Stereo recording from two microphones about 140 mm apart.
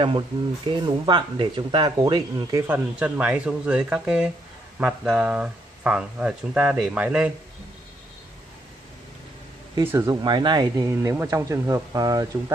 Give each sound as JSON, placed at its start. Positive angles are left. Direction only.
{"t": 0.0, "sound": "speech", "side_deg": -35}
{"t": 2.6, "sound": "speech", "side_deg": -15}
{"t": 9.8, "sound": "speech", "side_deg": -15}
{"t": 10.2, "sound": "speech", "side_deg": -30}
{"t": 11.1, "sound": "speech", "side_deg": -15}